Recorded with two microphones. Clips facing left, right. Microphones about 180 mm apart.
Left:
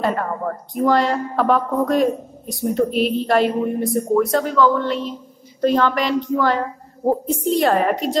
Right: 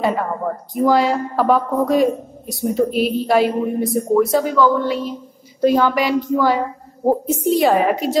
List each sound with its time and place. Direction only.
0.0 s speech: 5° right (ahead or behind)